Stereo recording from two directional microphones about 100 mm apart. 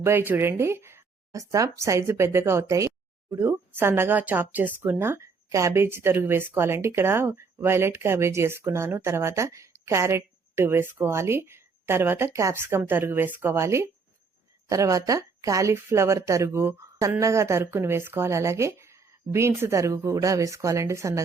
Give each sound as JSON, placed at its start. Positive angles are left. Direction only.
{"t": 0.0, "sound": "speech", "side_deg": -25}